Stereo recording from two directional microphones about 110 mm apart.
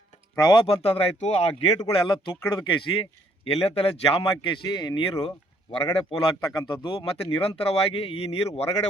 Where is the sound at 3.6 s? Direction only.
60° left (ahead or behind); by 5.0 s 40° left (ahead or behind).